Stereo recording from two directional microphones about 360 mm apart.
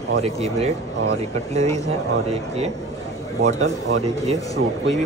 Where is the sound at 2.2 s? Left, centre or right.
Centre.